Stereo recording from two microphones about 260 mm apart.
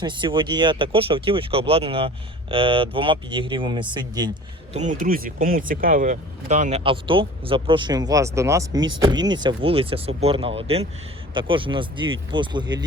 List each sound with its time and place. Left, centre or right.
0.0 s speech: centre
4.7 s speech: right